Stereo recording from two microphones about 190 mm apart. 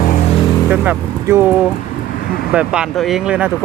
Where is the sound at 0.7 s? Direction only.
10° right (ahead or behind).